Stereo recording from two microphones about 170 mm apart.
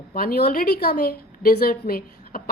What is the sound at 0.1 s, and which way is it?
A woman's voice, 60° left (ahead or behind).